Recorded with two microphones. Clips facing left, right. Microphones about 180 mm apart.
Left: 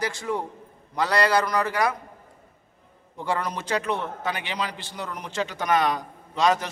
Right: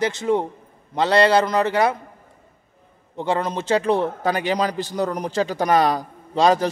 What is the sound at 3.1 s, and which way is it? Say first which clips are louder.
A man's voice: right 5 dB; 25° right (ahead or behind).